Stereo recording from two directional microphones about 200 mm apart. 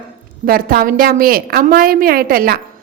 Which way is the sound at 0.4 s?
50° right (ahead or behind).